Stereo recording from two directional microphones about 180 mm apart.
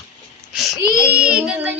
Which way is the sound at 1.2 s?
5° right (ahead or behind).